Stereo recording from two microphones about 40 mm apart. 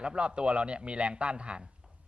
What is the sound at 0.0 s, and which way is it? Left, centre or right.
A man's voice, right.